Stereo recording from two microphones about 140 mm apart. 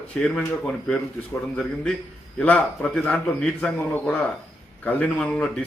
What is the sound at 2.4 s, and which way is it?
A man's voice, 10° left (ahead or behind).